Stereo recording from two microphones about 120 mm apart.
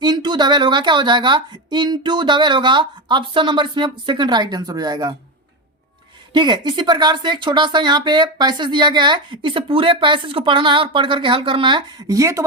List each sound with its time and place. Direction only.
0.0 s speech: 35° right (ahead or behind)
6.3 s speech: 40° right (ahead or behind)